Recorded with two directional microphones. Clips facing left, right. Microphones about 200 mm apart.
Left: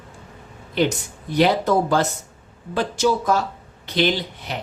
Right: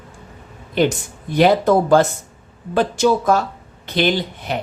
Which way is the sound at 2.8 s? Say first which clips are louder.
Right 4 dB; 55° right (ahead or behind).